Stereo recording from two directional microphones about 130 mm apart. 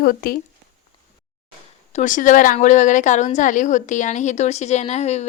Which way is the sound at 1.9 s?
85° left.